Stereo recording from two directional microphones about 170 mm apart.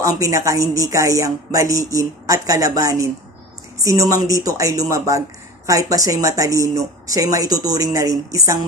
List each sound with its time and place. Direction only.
0.3 s speech: 20° right (ahead or behind)